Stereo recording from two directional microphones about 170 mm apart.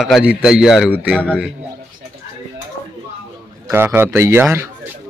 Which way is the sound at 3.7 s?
15° right (ahead or behind).